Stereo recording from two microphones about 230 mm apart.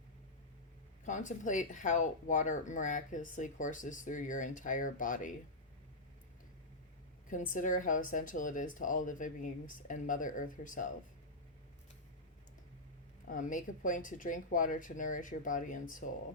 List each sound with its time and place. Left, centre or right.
1.0 s speech: left
7.3 s speech: left
13.2 s speech: left